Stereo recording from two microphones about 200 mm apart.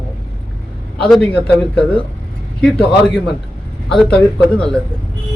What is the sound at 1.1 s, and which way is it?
Speech, 5° left (ahead or behind).